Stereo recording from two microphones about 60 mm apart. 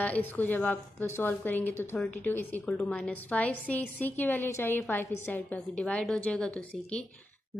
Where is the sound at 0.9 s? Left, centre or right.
Left.